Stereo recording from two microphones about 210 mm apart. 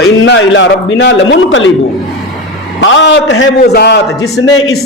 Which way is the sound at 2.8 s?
60° left (ahead or behind).